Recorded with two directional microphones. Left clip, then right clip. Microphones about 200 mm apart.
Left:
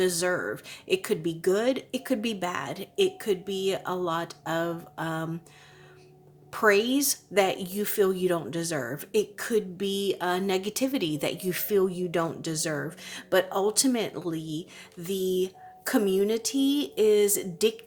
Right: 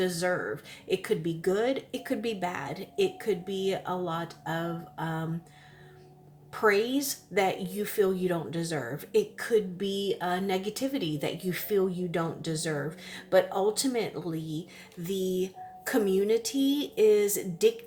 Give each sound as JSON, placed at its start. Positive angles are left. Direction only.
{"t": 0.0, "sound": "a woman's voice", "side_deg": 40}
{"t": 6.5, "sound": "a woman's voice", "side_deg": 40}